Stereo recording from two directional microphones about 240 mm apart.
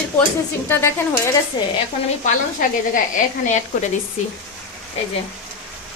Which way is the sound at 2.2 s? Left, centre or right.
Left.